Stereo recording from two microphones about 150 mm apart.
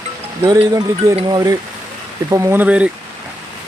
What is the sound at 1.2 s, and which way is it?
Speech, 25° right (ahead or behind).